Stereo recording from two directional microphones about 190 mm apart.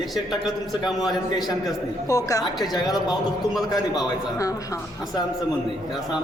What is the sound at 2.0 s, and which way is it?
Speech, 15° left (ahead or behind).